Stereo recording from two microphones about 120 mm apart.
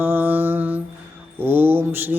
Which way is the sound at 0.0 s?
15° right (ahead or behind).